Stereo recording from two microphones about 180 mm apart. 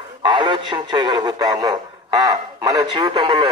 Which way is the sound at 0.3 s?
25° right (ahead or behind).